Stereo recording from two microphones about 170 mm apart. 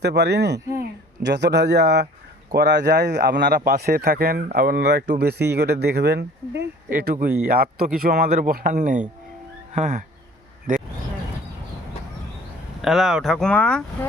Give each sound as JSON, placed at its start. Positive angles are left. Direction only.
{"t": 0.0, "sound": "a man's voice", "side_deg": -80}
{"t": 6.9, "sound": "speech", "side_deg": -50}
{"t": 7.3, "sound": "speech", "side_deg": -60}
{"t": 12.8, "sound": "speech", "side_deg": 0}